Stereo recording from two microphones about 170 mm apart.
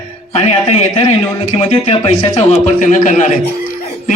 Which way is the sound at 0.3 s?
40° left (ahead or behind).